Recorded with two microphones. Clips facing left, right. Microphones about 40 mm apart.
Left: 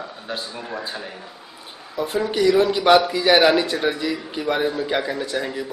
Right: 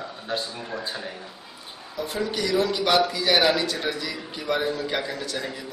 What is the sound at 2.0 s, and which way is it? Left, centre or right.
Speech, centre.